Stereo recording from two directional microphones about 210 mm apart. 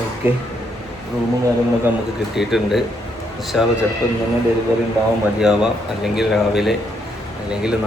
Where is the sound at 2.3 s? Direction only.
Centre (ahead or behind).